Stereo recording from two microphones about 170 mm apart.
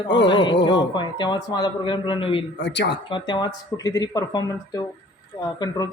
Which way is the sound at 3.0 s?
25° left (ahead or behind).